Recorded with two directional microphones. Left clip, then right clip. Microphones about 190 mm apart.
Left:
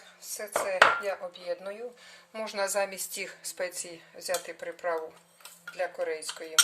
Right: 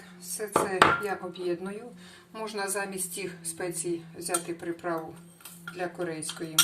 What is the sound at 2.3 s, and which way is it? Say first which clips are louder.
A woman's voice: left 3 dB; 50° left (ahead or behind).